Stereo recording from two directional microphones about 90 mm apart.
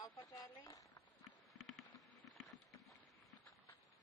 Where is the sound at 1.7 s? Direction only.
Centre (ahead or behind).